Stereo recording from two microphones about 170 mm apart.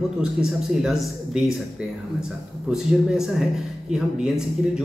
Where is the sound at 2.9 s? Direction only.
Centre (ahead or behind).